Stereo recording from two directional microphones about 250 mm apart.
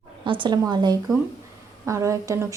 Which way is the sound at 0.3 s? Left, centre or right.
Centre.